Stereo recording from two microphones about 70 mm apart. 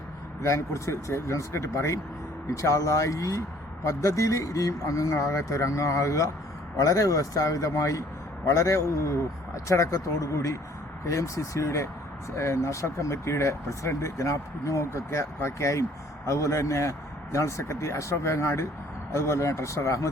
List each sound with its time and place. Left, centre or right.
0.4 s speech: left